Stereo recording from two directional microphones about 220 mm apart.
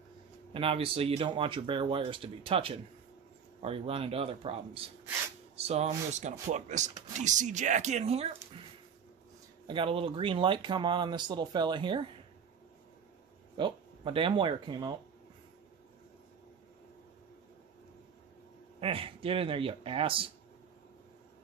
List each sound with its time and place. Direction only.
0.5 s speech: 25° right (ahead or behind)
9.7 s speech: 25° right (ahead or behind)
13.6 s speech: 20° right (ahead or behind)
18.8 s speech: 25° right (ahead or behind)